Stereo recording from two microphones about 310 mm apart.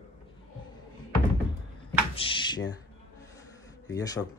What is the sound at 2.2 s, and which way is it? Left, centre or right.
Drawer open or close, centre.